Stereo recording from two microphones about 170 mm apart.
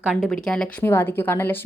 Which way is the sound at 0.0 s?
Centre (ahead or behind).